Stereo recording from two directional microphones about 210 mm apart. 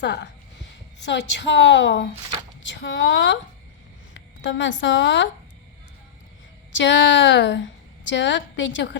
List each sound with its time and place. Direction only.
0.0 s a woman's voice: 55° left (ahead or behind)
6.7 s a woman's voice: 60° left (ahead or behind)